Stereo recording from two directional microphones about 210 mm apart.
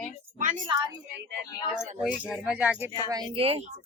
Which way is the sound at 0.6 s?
20° right (ahead or behind).